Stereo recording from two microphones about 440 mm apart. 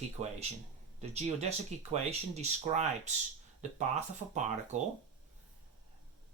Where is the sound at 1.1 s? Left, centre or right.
Centre.